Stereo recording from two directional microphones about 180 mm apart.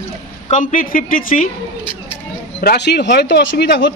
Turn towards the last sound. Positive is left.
turn(degrees=70)  # may be behind; listen again after turning